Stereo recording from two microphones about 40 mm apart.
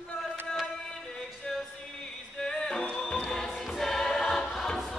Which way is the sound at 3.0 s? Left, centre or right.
Left.